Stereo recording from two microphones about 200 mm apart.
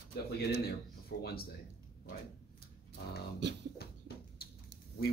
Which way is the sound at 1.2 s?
50° left (ahead or behind).